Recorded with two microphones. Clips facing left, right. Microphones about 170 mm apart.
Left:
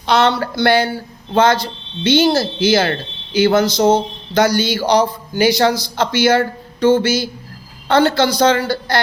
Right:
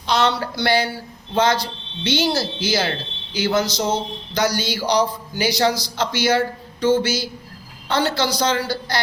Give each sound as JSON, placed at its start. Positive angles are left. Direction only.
{"t": 0.0, "sound": "speech", "side_deg": 60}